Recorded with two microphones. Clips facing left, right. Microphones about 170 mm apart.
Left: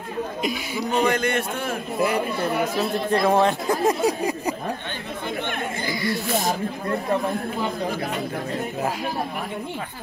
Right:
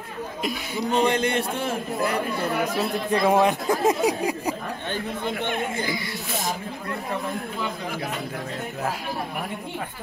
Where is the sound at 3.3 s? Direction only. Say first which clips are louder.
Right 1 dB; 10° right (ahead or behind).